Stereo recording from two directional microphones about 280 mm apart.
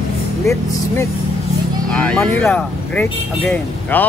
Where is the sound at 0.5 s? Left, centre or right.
Centre.